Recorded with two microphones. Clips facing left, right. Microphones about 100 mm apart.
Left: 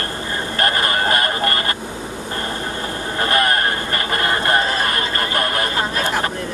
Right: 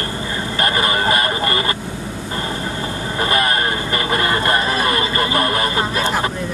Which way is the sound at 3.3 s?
10° right (ahead or behind).